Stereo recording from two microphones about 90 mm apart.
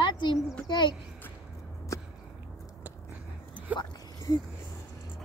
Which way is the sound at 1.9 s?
35° left (ahead or behind).